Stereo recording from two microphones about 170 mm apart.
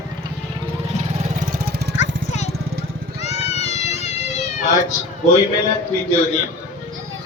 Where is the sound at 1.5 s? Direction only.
65° right (ahead or behind).